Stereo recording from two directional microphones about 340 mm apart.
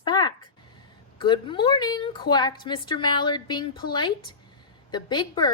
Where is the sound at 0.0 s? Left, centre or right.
Centre.